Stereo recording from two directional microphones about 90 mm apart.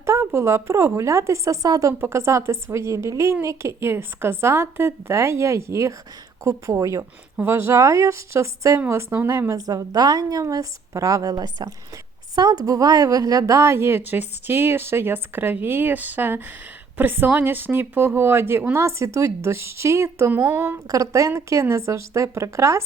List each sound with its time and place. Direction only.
0.0 s a sound: 30° right (ahead or behind)
0.3 s a woman's voice: 30° right (ahead or behind)
20.8 s a woman's voice: 40° right (ahead or behind)